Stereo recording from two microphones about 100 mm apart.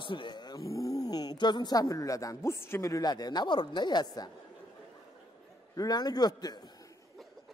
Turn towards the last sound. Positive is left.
turn(degrees=40)  # may be behind; listen again after turning